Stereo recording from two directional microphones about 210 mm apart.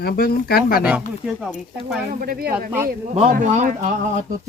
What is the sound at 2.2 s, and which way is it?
Speech, 45° right (ahead or behind).